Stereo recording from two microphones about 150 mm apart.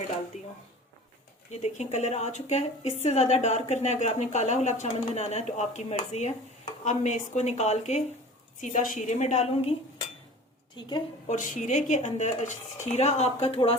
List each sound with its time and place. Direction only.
0.3 s a woman's voice: 50° left (ahead or behind)
1.6 s a woman's voice: 50° left (ahead or behind)
10.8 s a woman's voice: 30° left (ahead or behind)
11.3 s a woman's voice: 55° left (ahead or behind); by 13.7 s 40° left (ahead or behind)